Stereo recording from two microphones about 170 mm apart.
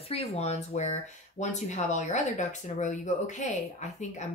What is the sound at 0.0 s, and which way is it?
Speech, 35° left (ahead or behind).